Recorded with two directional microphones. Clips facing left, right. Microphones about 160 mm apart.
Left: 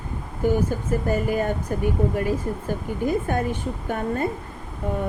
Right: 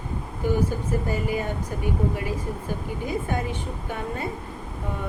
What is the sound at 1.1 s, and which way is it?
Speech, 50° left (ahead or behind).